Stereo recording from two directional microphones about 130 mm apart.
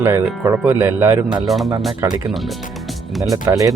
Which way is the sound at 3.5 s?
30° right (ahead or behind).